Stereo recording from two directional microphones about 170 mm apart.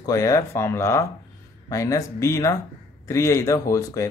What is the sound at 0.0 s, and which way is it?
Speech, 20° left (ahead or behind).